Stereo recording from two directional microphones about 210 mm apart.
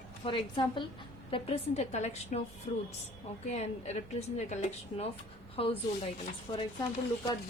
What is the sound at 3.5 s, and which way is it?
A woman's voice, 30° left (ahead or behind).